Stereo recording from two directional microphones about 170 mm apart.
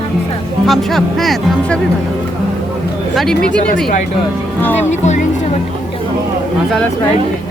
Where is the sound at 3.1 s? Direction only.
Centre (ahead or behind).